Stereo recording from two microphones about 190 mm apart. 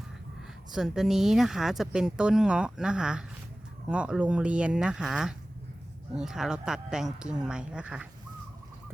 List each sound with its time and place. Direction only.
0.7 s speech: 5° right (ahead or behind)